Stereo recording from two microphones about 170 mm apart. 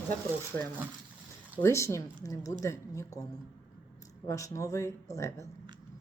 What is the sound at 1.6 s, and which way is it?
A woman's voice, 15° left (ahead or behind).